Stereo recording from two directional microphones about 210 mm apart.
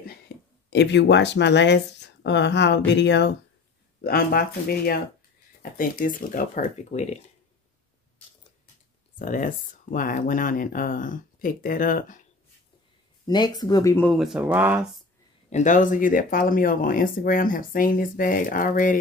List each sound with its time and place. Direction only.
0.3 s a sound: 50° left (ahead or behind)
0.7 s speech: 55° left (ahead or behind); by 7.2 s 30° left (ahead or behind)
9.2 s speech: 40° left (ahead or behind)
13.3 s speech: 20° left (ahead or behind)
14.1 s speech: centre (ahead or behind)
15.5 s speech: 35° left (ahead or behind)